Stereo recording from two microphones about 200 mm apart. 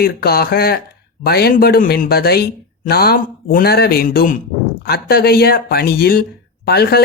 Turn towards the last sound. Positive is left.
turn(degrees=55)  # may be behind; listen again after turning